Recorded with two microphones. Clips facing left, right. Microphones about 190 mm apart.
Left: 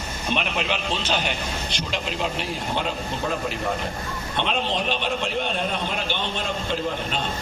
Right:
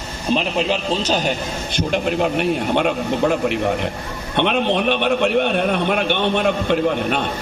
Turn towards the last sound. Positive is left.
turn(degrees=-60)  # may be behind; listen again after turning